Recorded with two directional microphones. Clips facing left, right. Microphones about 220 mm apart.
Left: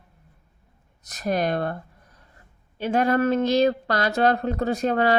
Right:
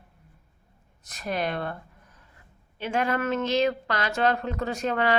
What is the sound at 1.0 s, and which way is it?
Speech, 40° left (ahead or behind).